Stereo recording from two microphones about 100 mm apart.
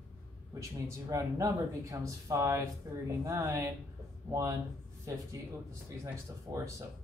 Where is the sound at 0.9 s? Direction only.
35° right (ahead or behind).